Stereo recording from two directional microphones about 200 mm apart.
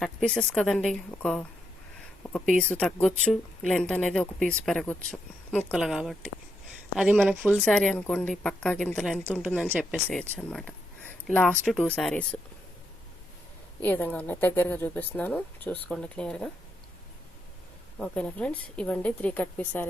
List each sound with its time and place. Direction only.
0.0 s speech: 5° left (ahead or behind)
9.5 s speech: 10° left (ahead or behind)
13.8 s speech: 10° left (ahead or behind)
18.0 s speech: 5° left (ahead or behind)